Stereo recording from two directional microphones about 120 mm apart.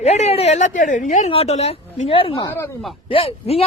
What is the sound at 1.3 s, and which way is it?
Speech, 60° left (ahead or behind).